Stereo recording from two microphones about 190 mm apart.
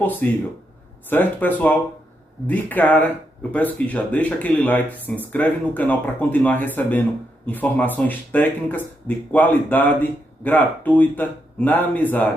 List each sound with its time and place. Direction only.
0.0 s speech: 10° left (ahead or behind)